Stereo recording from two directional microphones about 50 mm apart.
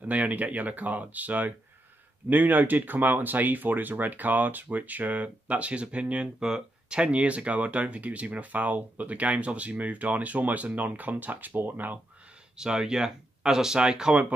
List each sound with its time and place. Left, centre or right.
0.0 s speech: right
12.5 s speech: centre